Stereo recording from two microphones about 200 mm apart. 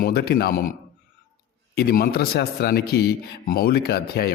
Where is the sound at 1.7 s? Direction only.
50° left (ahead or behind).